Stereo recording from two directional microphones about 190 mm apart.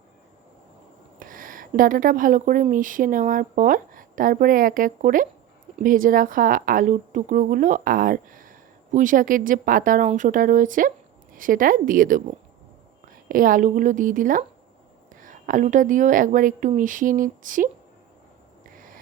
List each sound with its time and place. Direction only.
1.2 s speech: 45° right (ahead or behind)
13.2 s speech: 45° right (ahead or behind)